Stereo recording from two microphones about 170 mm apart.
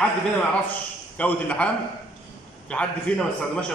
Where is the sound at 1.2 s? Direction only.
5° left (ahead or behind).